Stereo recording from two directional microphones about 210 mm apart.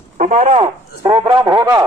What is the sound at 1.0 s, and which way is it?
Speech, 25° right (ahead or behind).